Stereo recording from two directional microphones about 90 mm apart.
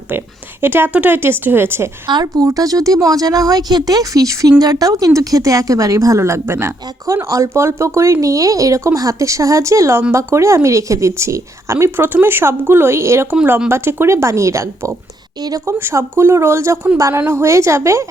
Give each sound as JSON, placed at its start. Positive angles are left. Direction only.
{"t": 0.6, "sound": "speech", "side_deg": -25}
{"t": 2.2, "sound": "speech", "side_deg": -40}
{"t": 15.4, "sound": "speech", "side_deg": -50}
{"t": 15.6, "sound": "speech", "side_deg": -30}